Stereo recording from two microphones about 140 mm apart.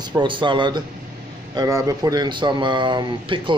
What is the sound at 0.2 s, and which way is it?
Speech, 35° right (ahead or behind).